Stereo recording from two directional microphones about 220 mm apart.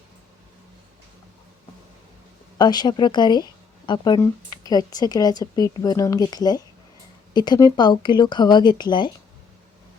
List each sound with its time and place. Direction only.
2.6 s speech: 20° left (ahead or behind)